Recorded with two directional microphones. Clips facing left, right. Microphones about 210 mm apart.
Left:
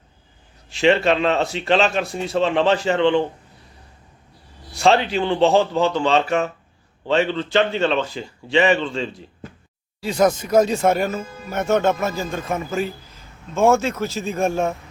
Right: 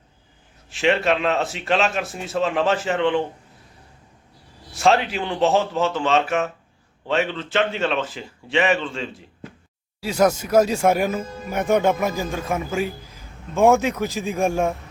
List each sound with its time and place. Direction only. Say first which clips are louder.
0.7 s speech: left 3 dB; centre (ahead or behind)
4.7 s a sound: left 1 dB; centre (ahead or behind)
5.0 s speech: left 4 dB; 5° right (ahead or behind)
7.3 s a man's voice: left 3 dB; 5° right (ahead or behind)